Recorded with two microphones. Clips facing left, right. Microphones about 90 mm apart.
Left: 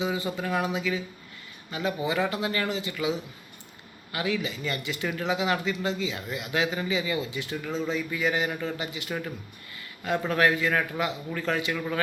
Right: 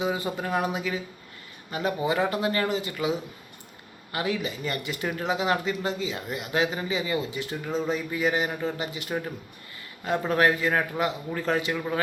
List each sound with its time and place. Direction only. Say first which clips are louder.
0.0 s speech: right 1 dB; 45° right (ahead or behind); by 12.0 s 25° right (ahead or behind)